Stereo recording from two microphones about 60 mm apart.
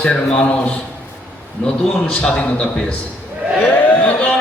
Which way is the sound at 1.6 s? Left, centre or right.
Centre.